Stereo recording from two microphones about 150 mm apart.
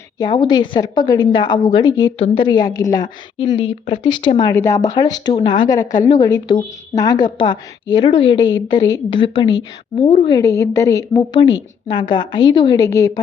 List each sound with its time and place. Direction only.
0.2 s a woman's voice: 30° left (ahead or behind)
2.1 s a woman's voice: 40° left (ahead or behind)
4.5 s a woman's voice: 20° left (ahead or behind)